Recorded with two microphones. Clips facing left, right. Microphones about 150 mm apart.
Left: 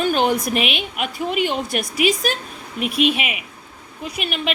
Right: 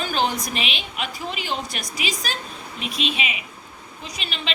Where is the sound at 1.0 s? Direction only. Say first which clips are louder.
Left 9 dB; 55° left (ahead or behind).